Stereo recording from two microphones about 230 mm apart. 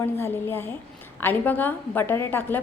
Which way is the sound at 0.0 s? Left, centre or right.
Centre.